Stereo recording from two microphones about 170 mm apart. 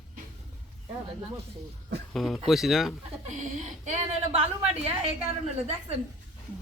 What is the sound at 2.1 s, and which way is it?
Speech, centre (ahead or behind).